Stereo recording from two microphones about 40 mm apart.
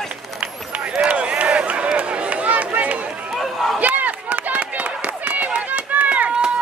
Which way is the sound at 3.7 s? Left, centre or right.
Right.